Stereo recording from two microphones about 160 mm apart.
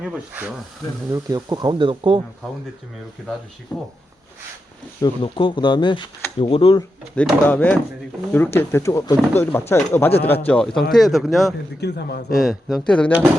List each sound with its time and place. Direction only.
0.0 s speech: 5° right (ahead or behind)
1.1 s speech: 20° right (ahead or behind)
5.0 s speech: 30° left (ahead or behind)
7.2 s speech: 10° left (ahead or behind)
11.8 s a man's voice: 90° left
12.3 s speech: centre (ahead or behind)